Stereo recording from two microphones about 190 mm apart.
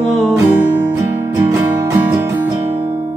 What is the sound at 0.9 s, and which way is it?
Music, 10° right (ahead or behind).